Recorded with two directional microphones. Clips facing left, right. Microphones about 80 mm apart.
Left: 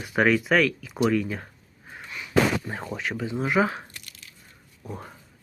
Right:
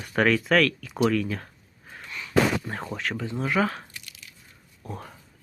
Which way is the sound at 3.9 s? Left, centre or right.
Left.